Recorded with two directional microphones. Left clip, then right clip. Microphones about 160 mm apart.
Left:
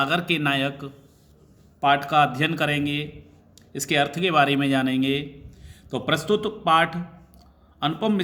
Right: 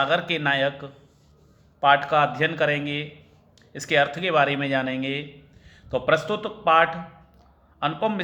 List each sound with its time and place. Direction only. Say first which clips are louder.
0.0 s a man's voice: even; 25° left (ahead or behind)